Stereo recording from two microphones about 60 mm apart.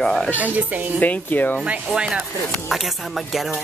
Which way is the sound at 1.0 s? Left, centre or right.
Left.